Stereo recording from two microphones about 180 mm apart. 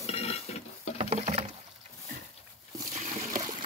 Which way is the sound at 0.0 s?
35° left (ahead or behind).